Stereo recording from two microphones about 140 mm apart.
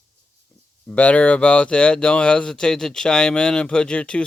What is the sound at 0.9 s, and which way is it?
Speech, 10° left (ahead or behind).